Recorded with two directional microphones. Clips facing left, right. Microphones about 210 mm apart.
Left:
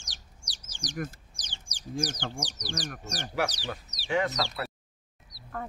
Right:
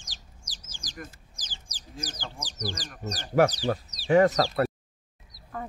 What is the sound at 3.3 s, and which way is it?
Speech, 50° right (ahead or behind).